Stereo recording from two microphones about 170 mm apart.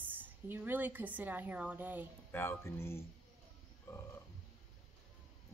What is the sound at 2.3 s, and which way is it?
Speech, 15° left (ahead or behind).